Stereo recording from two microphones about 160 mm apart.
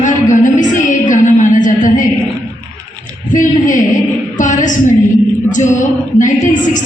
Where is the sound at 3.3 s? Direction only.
55° left (ahead or behind).